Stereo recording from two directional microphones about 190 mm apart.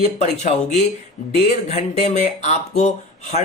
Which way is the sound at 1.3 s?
35° left (ahead or behind).